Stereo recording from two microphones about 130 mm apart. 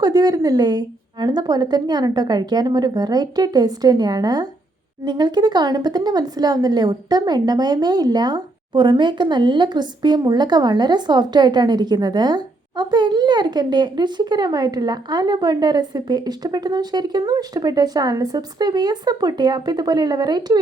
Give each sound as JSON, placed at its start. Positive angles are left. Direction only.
{"t": 0.0, "sound": "speech", "side_deg": -30}